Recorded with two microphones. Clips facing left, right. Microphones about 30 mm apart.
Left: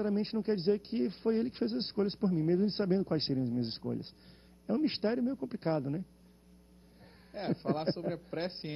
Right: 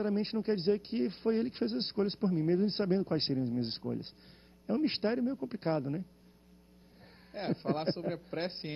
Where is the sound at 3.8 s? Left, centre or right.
Centre.